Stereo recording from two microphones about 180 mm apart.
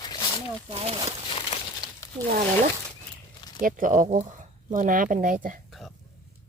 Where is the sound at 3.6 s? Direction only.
50° right (ahead or behind).